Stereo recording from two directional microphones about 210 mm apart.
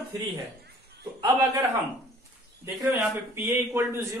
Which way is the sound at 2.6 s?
10° right (ahead or behind).